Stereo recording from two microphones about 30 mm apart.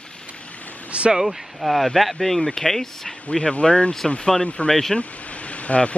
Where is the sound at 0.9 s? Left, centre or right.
Right.